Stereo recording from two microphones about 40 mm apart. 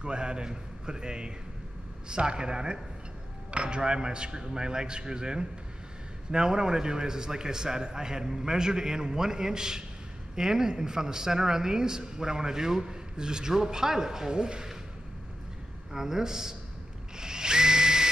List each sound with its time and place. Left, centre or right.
0.0 s speech: right
15.9 s speech: centre
17.2 s drill: centre